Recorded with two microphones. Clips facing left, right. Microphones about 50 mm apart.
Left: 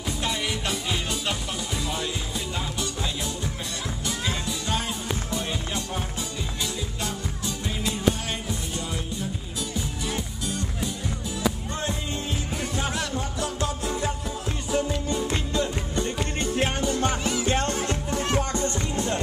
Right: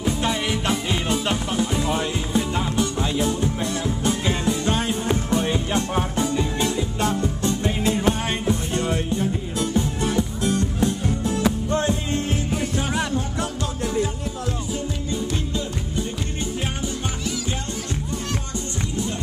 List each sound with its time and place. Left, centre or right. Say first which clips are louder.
0.0 s music: right 5 dB; centre; by 12.4 s right
13.6 s music: right 5 dB; left
15.5 s music: left 1 dB; left
17.5 s music: left 4 dB; left